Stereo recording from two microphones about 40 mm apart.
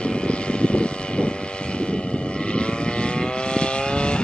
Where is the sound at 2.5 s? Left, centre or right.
Left.